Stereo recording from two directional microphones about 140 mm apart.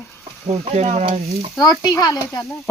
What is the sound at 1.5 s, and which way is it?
Speech, 25° left (ahead or behind).